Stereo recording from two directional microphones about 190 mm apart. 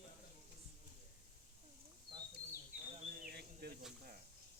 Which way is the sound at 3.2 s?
60° right (ahead or behind).